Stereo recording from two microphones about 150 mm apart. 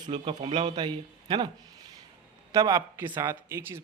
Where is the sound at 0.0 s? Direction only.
35° right (ahead or behind).